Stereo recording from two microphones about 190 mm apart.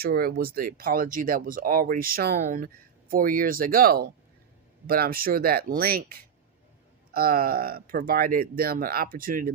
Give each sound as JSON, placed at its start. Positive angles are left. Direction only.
{"t": 0.0, "sound": "speech", "side_deg": -55}